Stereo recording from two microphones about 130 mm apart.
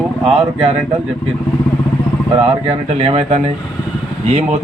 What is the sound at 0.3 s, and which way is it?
Speech, 50° right (ahead or behind).